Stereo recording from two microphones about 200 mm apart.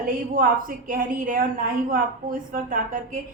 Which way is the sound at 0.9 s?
45° right (ahead or behind).